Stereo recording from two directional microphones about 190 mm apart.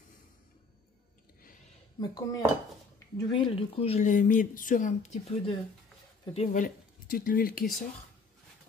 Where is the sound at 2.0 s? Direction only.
20° left (ahead or behind); by 7.6 s 50° left (ahead or behind).